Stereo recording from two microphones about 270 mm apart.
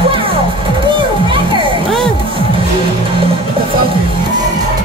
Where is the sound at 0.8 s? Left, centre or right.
Centre.